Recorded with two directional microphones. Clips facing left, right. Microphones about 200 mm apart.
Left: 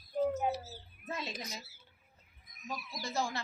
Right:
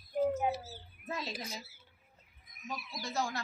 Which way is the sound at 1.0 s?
Centre (ahead or behind).